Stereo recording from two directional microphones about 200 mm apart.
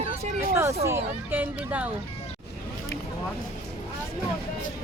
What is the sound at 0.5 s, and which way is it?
Hubbub, 15° right (ahead or behind).